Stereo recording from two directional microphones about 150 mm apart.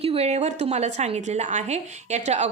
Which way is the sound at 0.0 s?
40° right (ahead or behind).